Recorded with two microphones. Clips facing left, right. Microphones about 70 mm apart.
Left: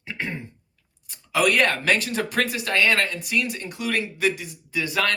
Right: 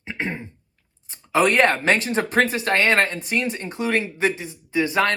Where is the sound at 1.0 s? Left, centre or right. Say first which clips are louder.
Right 3 dB; right.